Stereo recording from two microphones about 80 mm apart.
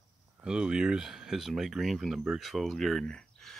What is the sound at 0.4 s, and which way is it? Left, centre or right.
Speech, centre.